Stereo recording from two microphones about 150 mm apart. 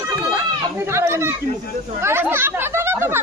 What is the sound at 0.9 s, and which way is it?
Speech, 20° right (ahead or behind).